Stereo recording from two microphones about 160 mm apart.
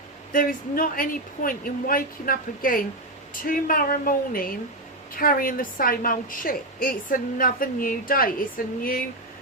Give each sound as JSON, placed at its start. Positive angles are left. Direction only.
{"t": 0.3, "sound": "a woman's voice", "side_deg": 60}